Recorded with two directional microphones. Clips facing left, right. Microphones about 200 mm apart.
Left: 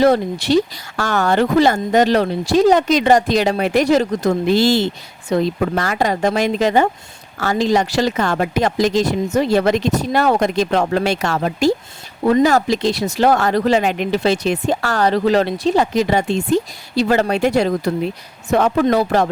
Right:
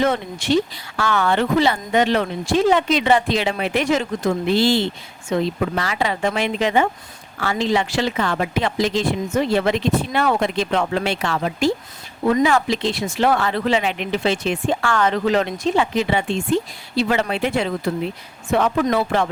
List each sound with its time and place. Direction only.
0.0 s speech: 35° left (ahead or behind)